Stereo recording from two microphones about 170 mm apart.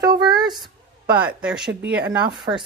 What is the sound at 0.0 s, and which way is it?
Speech, 25° right (ahead or behind).